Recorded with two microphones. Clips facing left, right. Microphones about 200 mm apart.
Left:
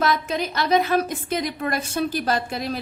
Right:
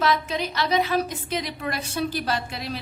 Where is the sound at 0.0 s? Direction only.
50° left (ahead or behind).